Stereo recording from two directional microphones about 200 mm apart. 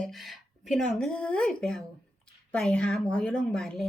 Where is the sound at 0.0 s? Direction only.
Centre (ahead or behind).